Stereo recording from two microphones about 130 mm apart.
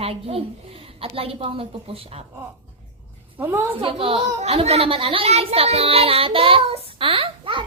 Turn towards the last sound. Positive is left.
turn(degrees=-40)  # may be behind; listen again after turning